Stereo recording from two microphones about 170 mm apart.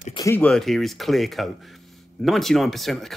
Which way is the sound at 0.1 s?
20° left (ahead or behind).